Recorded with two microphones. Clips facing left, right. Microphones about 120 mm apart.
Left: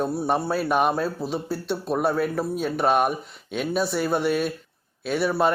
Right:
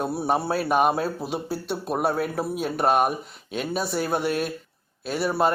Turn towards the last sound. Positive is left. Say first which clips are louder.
# left 1 dB
turn(degrees=0)  # may be behind; listen again after turning